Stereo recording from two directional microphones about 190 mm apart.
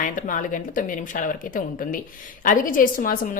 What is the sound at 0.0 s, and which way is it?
A woman's voice, 45° left (ahead or behind).